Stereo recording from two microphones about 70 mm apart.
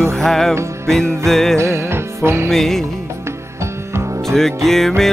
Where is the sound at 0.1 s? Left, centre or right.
Centre.